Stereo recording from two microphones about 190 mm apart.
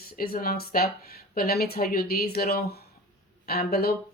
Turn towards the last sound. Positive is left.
turn(degrees=55)  # may be behind; listen again after turning